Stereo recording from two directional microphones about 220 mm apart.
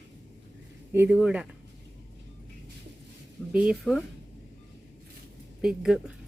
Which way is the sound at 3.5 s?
5° right (ahead or behind).